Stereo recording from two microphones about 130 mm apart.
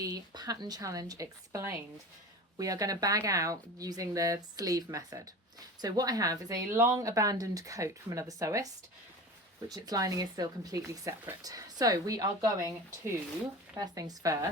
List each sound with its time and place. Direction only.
0.0 s speech: 30° right (ahead or behind)